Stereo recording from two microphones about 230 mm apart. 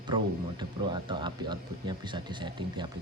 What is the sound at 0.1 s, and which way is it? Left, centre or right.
Speech, centre.